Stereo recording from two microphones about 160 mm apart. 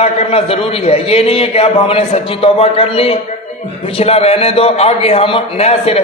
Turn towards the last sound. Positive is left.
turn(degrees=40)  # may be behind; listen again after turning